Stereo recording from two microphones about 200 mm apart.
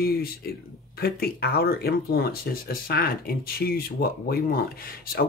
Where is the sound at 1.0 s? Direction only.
50° left (ahead or behind).